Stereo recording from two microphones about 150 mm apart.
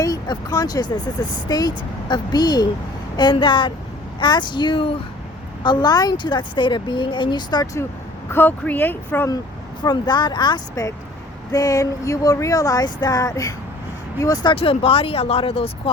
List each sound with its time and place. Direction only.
0.0 s speech: 25° left (ahead or behind)
8.3 s speech: 15° left (ahead or behind)
9.8 s speech: 30° left (ahead or behind)
14.5 s speech: 40° left (ahead or behind)